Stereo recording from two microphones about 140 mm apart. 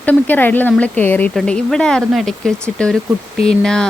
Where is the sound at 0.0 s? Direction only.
10° left (ahead or behind).